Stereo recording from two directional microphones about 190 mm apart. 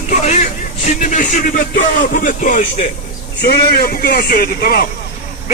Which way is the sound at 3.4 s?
55° left (ahead or behind).